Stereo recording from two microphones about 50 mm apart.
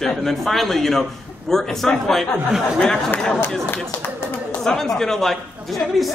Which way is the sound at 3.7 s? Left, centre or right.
Left.